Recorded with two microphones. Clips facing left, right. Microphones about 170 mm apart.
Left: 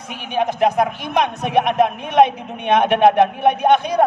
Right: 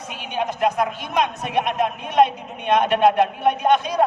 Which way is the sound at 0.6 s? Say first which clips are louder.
Left 3 dB; 60° left (ahead or behind).